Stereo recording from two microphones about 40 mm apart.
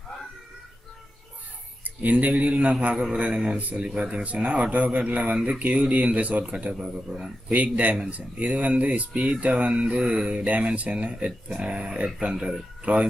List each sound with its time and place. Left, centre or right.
2.0 s speech: right
3.8 s speech: right